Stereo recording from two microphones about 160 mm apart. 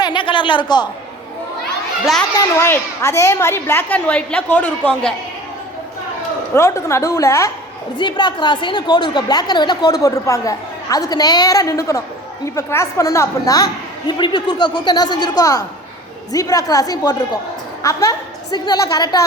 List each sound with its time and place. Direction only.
0.0 s a sound: 30° left (ahead or behind)
2.6 s a woman's voice: 15° left (ahead or behind)
6.5 s a woman's voice: 15° left (ahead or behind)
7.9 s a woman's voice: 30° left (ahead or behind)